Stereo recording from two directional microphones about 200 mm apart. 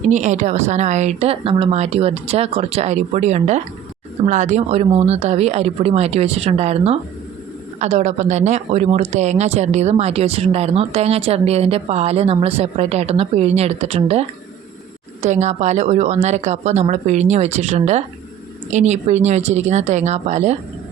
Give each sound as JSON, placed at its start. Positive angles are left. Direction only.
{"t": 0.1, "sound": "speech", "side_deg": -35}